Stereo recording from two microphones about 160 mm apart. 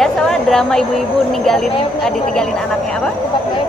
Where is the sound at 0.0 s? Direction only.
5° left (ahead or behind).